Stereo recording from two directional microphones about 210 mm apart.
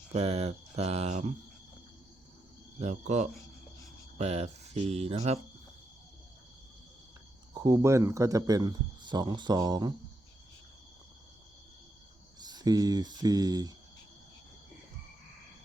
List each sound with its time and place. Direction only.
0.1 s speech: 30° right (ahead or behind)
2.7 s speech: 30° right (ahead or behind)
7.5 s speech: 15° right (ahead or behind)
12.4 s speech: 20° right (ahead or behind)